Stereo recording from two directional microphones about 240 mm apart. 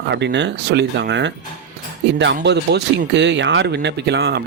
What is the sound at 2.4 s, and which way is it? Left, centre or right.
Speech, right.